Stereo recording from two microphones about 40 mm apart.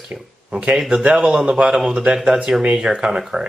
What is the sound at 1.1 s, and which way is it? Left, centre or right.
Speech, centre.